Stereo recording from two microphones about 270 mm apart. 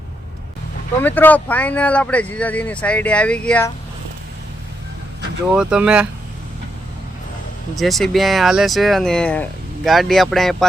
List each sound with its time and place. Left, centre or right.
1.0 s speech: centre
5.5 s speech: centre
7.8 s speech: centre